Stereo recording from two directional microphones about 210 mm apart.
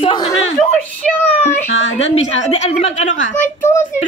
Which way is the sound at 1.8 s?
30° left (ahead or behind).